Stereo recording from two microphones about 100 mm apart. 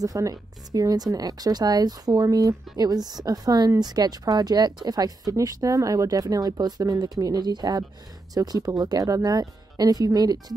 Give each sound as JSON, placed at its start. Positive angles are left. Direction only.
{"t": 0.0, "sound": "speech", "side_deg": -35}